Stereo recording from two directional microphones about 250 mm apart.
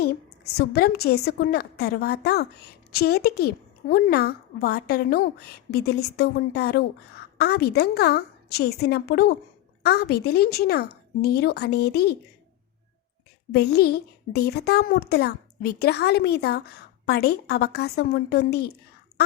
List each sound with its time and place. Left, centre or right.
0.5 s a woman's voice: left
13.5 s a woman's voice: left